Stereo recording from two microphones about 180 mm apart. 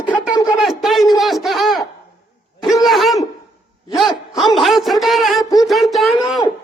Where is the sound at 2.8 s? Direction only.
Centre (ahead or behind).